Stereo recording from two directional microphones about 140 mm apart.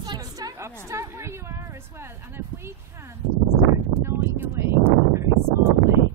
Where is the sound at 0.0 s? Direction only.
30° right (ahead or behind).